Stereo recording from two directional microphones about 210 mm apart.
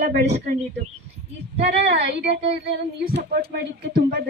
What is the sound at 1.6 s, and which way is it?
Speech, 50° right (ahead or behind).